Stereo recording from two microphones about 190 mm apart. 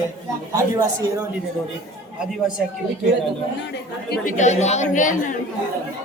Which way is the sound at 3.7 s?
55° left (ahead or behind).